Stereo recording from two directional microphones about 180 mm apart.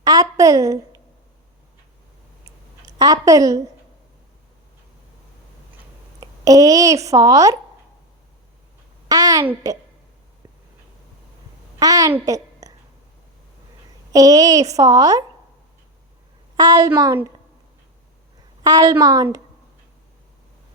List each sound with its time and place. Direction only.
0.0 s a sound: 20° right (ahead or behind)
2.8 s a woman's voice: 20° right (ahead or behind)
6.1 s speech: 20° right (ahead or behind)
9.0 s a woman's voice: 20° right (ahead or behind)
11.8 s a woman's voice: 20° right (ahead or behind)
12.1 s a sound: 20° right (ahead or behind)
14.1 s a woman's voice: 20° right (ahead or behind)
16.6 s a woman's voice: 20° right (ahead or behind)
18.6 s a woman's voice: 20° right (ahead or behind)